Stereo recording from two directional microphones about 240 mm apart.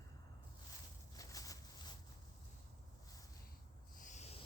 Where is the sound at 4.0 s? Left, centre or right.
Left.